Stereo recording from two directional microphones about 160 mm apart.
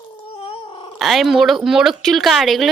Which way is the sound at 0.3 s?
35° left (ahead or behind).